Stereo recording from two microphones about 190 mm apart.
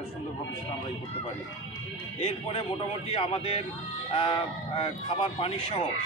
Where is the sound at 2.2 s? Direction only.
30° left (ahead or behind).